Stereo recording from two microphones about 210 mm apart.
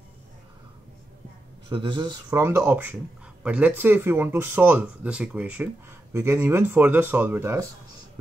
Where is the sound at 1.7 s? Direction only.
20° right (ahead or behind).